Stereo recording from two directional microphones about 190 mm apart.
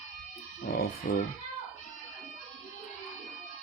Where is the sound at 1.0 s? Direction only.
50° left (ahead or behind).